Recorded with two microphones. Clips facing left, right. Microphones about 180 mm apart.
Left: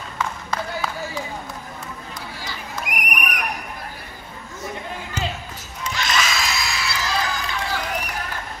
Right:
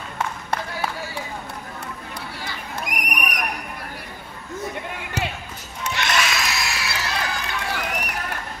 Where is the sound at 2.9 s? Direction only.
40° right (ahead or behind).